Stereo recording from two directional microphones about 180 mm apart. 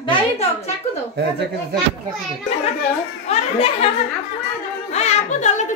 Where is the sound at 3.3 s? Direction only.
35° left (ahead or behind).